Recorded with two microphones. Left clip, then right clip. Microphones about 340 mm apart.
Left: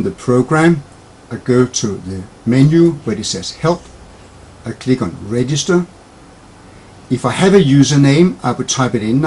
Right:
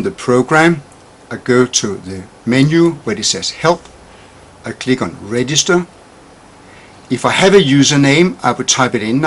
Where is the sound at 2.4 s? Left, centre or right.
Centre.